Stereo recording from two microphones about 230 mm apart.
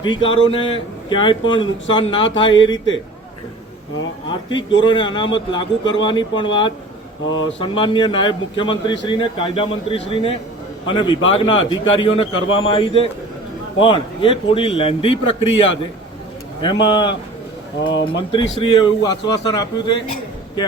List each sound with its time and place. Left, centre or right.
0.0 s a man's voice: left
4.3 s a man's voice: centre
18.2 s a man's voice: left